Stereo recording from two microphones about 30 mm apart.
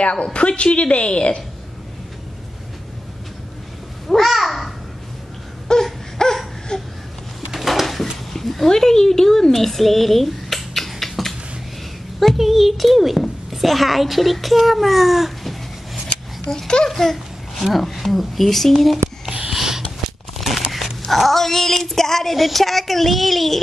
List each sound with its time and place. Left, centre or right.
0.1 s a woman's voice: left
4.1 s babbling: centre
5.7 s baby cry: left
6.2 s a sound: left
7.5 s pigeon: centre
7.8 s a sound: centre
12.4 s a child's voice: centre
16.6 s a child's voice: left
16.9 s a child's voice: centre
19.5 s a sound: centre
20.3 s a sound: centre
21.1 s speech: centre